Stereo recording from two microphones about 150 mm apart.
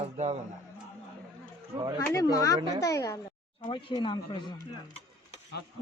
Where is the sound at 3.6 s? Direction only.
35° left (ahead or behind).